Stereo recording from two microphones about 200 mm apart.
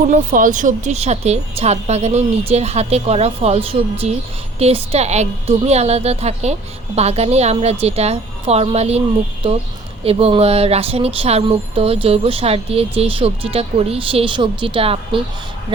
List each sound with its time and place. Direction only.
0.1 s a woman's voice: 40° right (ahead or behind)
4.6 s a woman's voice: 30° right (ahead or behind)